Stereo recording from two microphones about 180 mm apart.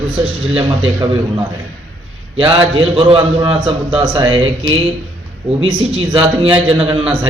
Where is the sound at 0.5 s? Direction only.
30° right (ahead or behind).